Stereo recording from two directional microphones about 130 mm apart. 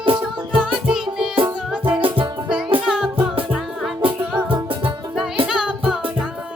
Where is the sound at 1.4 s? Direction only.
40° right (ahead or behind).